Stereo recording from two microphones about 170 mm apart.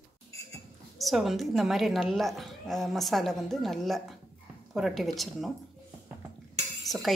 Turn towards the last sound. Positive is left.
turn(degrees=20)  # may be behind; listen again after turning